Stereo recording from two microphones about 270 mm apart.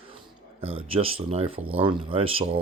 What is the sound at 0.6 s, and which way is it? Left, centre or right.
Speech, right.